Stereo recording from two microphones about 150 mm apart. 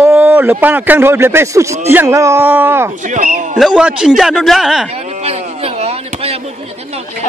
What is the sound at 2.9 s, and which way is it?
Speech, 60° right (ahead or behind).